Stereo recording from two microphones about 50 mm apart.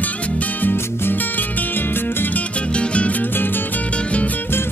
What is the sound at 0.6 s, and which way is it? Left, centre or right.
Music, left.